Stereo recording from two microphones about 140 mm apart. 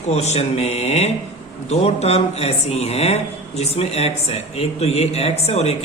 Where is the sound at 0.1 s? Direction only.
50° left (ahead or behind).